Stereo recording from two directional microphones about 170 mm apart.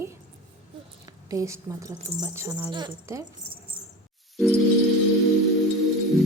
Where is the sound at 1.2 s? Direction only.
20° right (ahead or behind).